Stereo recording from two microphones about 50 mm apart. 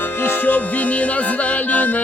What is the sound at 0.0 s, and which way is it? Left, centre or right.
Music, left.